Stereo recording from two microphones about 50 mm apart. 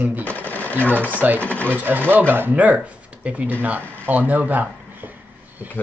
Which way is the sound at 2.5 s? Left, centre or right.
Right.